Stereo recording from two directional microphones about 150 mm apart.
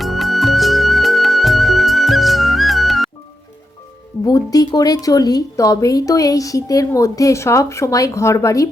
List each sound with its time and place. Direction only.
0.0 s music: centre (ahead or behind)
4.2 s speech: 25° left (ahead or behind)